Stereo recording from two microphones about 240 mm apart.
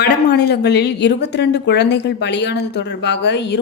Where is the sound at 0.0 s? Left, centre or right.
Left.